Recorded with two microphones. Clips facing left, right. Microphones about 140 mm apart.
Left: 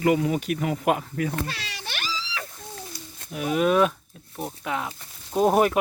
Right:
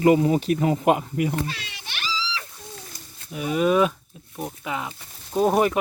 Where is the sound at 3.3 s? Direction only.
Centre (ahead or behind).